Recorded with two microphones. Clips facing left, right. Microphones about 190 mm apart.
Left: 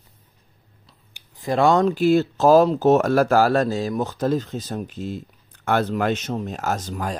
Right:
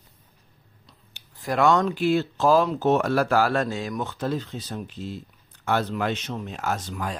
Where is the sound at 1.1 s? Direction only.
15° left (ahead or behind).